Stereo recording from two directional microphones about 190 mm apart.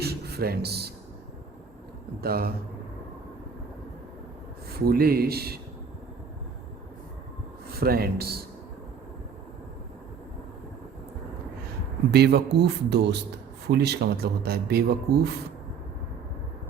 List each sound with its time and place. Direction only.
0.0 s a sound: 55° right (ahead or behind)
2.2 s a man's voice: 55° right (ahead or behind)
4.7 s a man's voice: 55° right (ahead or behind)
7.7 s a man's voice: 55° right (ahead or behind)
12.1 s a man's voice: 60° right (ahead or behind)